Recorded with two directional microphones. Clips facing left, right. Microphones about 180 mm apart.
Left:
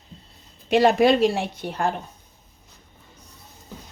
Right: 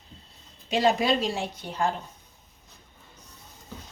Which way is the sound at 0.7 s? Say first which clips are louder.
Left 6 dB; 65° left (ahead or behind).